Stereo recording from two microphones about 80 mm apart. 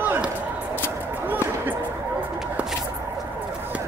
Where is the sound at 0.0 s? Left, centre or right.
Right.